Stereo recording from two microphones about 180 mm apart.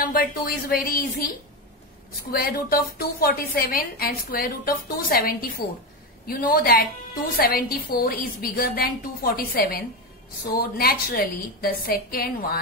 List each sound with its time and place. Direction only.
0.0 s a woman's voice: 55° left (ahead or behind)
2.3 s a woman's voice: 55° left (ahead or behind)